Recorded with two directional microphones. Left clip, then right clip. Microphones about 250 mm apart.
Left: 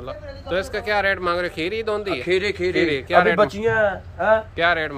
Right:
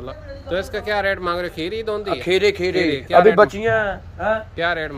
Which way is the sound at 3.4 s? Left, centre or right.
Centre.